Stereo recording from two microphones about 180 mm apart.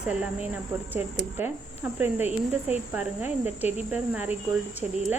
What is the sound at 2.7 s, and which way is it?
Speech, 10° right (ahead or behind).